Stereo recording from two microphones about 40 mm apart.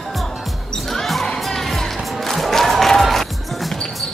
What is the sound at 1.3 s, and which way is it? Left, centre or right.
Music, centre.